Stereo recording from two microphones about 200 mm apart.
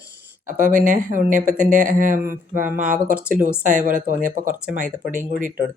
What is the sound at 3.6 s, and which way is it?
Speech, 40° right (ahead or behind).